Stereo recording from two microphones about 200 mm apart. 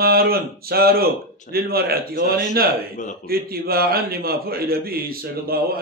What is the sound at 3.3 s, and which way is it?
A man's voice, 50° right (ahead or behind).